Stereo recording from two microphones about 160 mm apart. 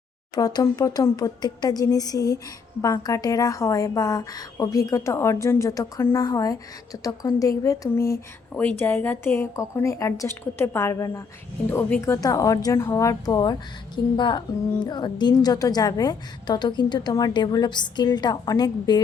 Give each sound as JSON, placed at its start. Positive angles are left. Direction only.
{"t": 0.3, "sound": "a woman's voice", "side_deg": 25}